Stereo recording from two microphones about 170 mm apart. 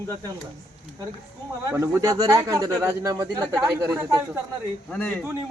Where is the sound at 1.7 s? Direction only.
20° right (ahead or behind).